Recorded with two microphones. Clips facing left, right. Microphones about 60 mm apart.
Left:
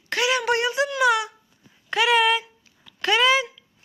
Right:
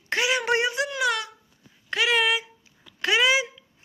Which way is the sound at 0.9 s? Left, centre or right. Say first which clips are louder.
Left 5 dB; centre.